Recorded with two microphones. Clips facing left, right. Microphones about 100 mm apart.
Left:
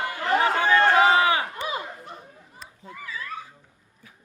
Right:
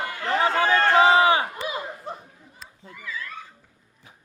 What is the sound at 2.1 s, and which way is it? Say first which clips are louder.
Chatter: right 6 dB; 35° right (ahead or behind).